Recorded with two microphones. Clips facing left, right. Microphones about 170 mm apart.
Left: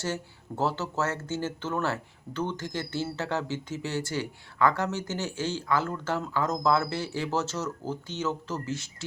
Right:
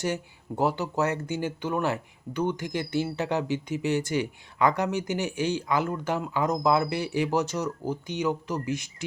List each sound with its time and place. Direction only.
0.0 s speech: 15° right (ahead or behind)